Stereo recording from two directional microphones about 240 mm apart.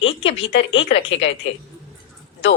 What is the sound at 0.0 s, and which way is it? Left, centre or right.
Speech, left.